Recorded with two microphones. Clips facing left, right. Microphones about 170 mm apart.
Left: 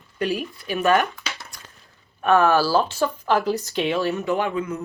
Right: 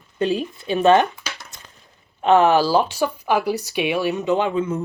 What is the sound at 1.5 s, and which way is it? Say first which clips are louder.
Coin: even; 20° right (ahead or behind).